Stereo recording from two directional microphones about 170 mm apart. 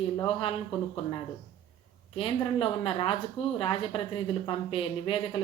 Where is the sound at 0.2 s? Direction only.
30° left (ahead or behind).